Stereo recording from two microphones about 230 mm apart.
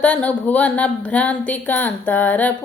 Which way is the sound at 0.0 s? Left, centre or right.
Centre.